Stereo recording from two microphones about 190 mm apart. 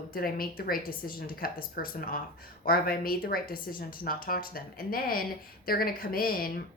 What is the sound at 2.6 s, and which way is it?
A woman's voice, 50° left (ahead or behind).